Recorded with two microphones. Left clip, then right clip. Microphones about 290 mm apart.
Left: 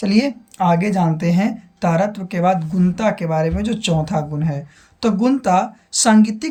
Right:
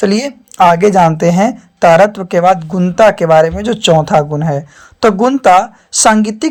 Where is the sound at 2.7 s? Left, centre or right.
Right.